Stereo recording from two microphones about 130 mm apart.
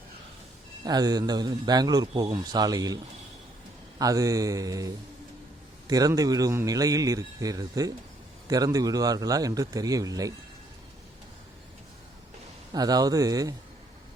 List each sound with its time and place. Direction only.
0.9 s a man's voice: 30° right (ahead or behind)
5.9 s speech: 25° right (ahead or behind)
12.7 s speech: 30° right (ahead or behind)